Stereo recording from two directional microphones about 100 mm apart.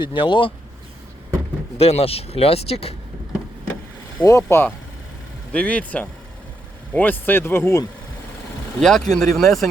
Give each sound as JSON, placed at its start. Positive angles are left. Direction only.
{"t": 0.0, "sound": "speech", "side_deg": 55}
{"t": 1.8, "sound": "speech", "side_deg": 90}
{"t": 4.2, "sound": "speech", "side_deg": 30}
{"t": 5.5, "sound": "speech", "side_deg": 10}
{"t": 8.8, "sound": "speech", "side_deg": 5}